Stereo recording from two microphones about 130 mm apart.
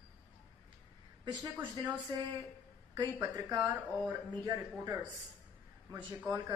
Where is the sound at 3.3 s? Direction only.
30° right (ahead or behind).